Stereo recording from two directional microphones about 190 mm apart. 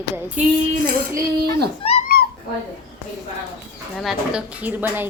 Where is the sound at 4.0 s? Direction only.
5° right (ahead or behind).